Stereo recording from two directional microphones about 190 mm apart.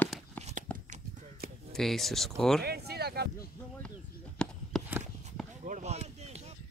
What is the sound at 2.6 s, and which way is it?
Speech, 55° right (ahead or behind).